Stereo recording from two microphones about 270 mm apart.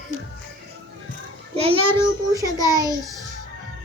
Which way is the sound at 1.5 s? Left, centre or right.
Right.